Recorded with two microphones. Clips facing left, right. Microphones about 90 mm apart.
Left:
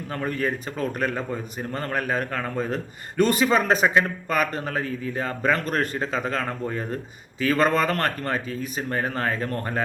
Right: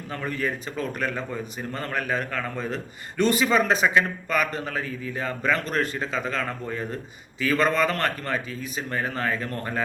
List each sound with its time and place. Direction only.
0.1 s a man's voice: 45° left (ahead or behind)